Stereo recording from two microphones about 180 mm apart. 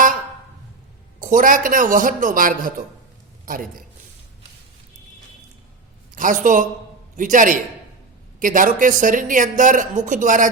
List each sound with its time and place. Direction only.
1.2 s a woman's voice: 50° right (ahead or behind)
6.1 s a woman's voice: 45° right (ahead or behind)